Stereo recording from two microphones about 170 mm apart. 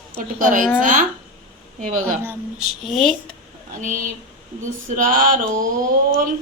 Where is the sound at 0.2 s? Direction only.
50° right (ahead or behind).